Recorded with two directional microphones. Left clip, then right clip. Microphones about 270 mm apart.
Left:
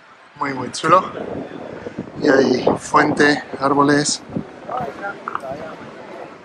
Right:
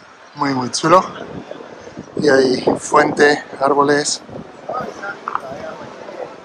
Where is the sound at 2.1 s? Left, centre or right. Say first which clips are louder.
Right 2 dB; centre.